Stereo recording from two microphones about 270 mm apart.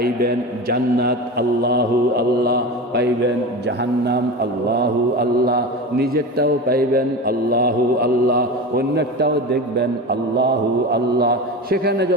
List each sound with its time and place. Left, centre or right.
0.0 s a man's voice: right